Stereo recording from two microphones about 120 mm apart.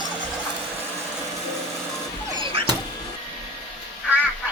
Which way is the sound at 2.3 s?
45° right (ahead or behind).